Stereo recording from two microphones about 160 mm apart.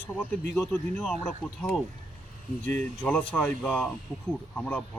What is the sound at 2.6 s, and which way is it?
Speech, 55° right (ahead or behind).